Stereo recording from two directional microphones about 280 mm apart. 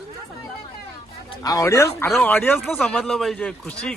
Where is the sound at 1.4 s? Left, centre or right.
Centre.